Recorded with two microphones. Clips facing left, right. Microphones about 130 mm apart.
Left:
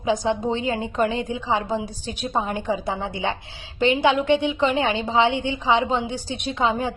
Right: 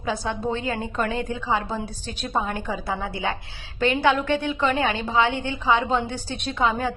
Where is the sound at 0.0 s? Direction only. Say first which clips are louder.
Left 4 dB; 15° left (ahead or behind).